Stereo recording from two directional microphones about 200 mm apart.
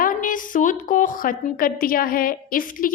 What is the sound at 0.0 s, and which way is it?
A woman's voice, 45° left (ahead or behind).